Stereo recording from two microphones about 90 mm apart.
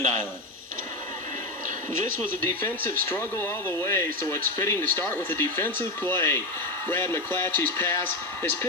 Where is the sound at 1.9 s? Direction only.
25° left (ahead or behind).